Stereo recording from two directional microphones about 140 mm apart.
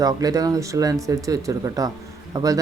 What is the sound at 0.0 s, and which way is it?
Speech, 25° right (ahead or behind).